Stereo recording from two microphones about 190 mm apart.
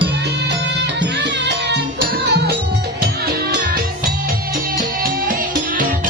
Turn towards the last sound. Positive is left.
turn(degrees=-45)  # may be behind; listen again after turning